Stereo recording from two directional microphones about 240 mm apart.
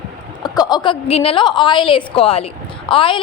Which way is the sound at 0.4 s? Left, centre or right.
Centre.